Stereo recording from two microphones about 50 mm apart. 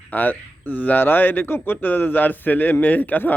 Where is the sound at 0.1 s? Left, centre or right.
Left.